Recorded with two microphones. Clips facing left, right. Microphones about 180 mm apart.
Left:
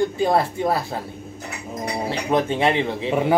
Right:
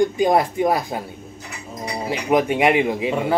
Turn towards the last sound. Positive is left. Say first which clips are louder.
# right 3 dB
turn(degrees=-10)  # may be behind; listen again after turning